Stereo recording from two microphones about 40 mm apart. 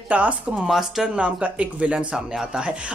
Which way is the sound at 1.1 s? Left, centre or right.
Right.